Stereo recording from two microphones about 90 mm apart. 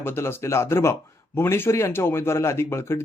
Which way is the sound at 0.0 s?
25° left (ahead or behind).